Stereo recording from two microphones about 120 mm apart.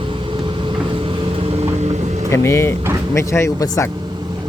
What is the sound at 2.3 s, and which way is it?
Speech, 20° left (ahead or behind).